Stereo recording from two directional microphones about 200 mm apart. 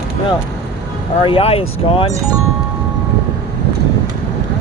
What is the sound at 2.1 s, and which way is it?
Speech, 15° right (ahead or behind).